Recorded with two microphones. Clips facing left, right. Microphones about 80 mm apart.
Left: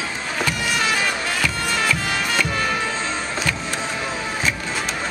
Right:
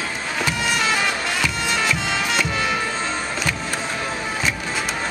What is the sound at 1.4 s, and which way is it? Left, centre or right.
Bagpipes, centre.